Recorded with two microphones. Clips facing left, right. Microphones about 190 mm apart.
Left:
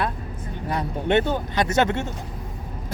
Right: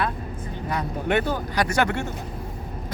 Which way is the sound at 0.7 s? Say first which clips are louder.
Left 2 dB; 30° left (ahead or behind).